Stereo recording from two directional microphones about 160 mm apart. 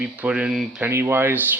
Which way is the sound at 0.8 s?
15° right (ahead or behind).